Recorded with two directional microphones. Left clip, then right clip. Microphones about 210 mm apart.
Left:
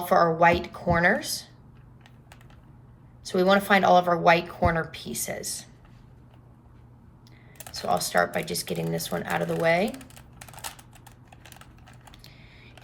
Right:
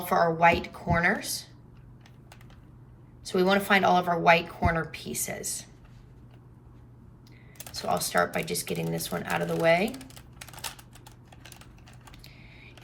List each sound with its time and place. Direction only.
0.0 s speech: 10° left (ahead or behind)
3.2 s speech: 10° left (ahead or behind)
7.6 s speech: 10° left (ahead or behind)
10.2 s typing: 10° left (ahead or behind)